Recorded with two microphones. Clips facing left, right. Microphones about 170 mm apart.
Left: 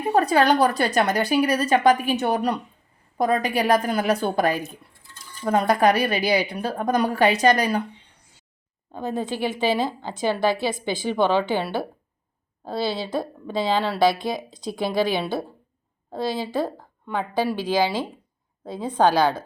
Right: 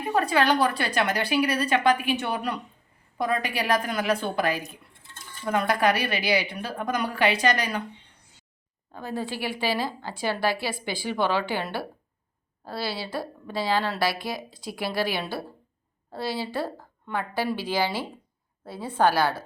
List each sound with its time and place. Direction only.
0.1 s a woman's voice: 40° left (ahead or behind)
5.5 s a woman's voice: 40° left (ahead or behind)
8.9 s a woman's voice: 20° left (ahead or behind)
12.6 s a woman's voice: 20° left (ahead or behind)
16.1 s a woman's voice: 15° left (ahead or behind)
18.7 s a woman's voice: 10° right (ahead or behind)
18.9 s a woman's voice: 15° left (ahead or behind)